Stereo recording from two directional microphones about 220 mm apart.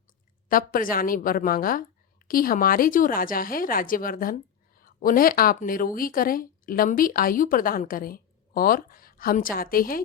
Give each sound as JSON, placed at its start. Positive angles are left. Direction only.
{"t": 0.4, "sound": "speech", "side_deg": 40}